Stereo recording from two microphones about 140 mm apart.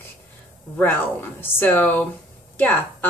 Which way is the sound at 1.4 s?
15° left (ahead or behind).